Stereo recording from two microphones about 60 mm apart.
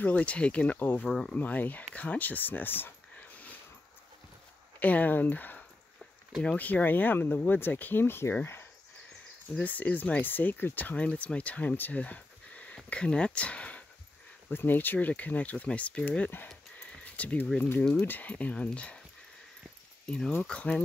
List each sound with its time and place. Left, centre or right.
0.0 s speech: left
1.0 s speech: centre
1.4 s speech: left
4.7 s speech: left
9.6 s speech: left
14.5 s speech: left
16.7 s a sound: left
18.0 s speech: left
20.4 s speech: centre